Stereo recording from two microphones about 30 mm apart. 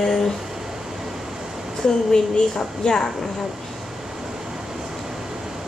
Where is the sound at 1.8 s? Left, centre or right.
Left.